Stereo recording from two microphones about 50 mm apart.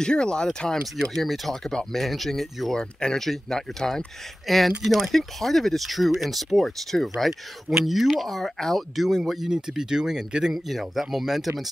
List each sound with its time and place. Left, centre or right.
0.0 s speech: centre
2.8 s speech: centre